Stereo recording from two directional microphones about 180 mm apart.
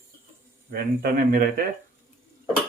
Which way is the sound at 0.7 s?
55° right (ahead or behind).